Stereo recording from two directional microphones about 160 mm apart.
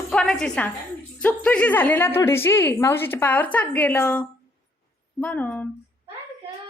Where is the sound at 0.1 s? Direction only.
5° left (ahead or behind).